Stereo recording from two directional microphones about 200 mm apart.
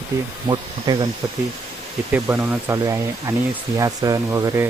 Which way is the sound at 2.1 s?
5° right (ahead or behind).